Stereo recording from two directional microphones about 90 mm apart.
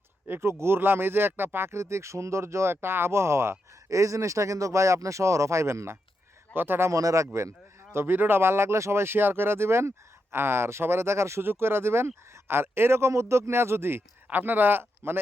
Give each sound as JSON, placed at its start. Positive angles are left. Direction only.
{"t": 0.3, "sound": "speech", "side_deg": -30}
{"t": 7.9, "sound": "speech", "side_deg": -25}